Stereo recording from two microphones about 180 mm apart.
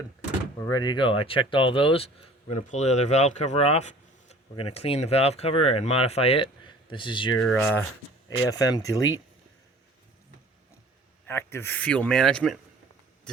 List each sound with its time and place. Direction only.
0.6 s speech: 20° left (ahead or behind)
2.5 s speech: 40° left (ahead or behind)
7.3 s speech: 5° left (ahead or behind)
8.4 s speech: 20° left (ahead or behind)
11.3 s speech: 15° left (ahead or behind)